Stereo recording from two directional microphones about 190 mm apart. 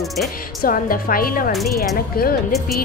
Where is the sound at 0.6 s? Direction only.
50° left (ahead or behind).